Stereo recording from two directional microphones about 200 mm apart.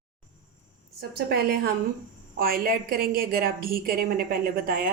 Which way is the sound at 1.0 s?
50° right (ahead or behind).